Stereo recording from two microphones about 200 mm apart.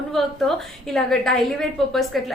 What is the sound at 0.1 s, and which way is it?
A woman's voice, centre (ahead or behind).